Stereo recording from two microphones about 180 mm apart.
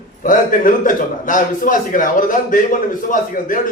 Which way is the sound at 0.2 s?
50° left (ahead or behind).